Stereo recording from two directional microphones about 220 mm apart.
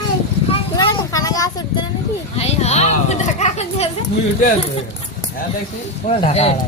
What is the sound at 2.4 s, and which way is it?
Speech, 30° left (ahead or behind).